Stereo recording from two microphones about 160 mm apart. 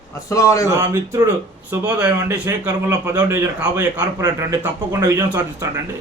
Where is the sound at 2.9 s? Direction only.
25° right (ahead or behind).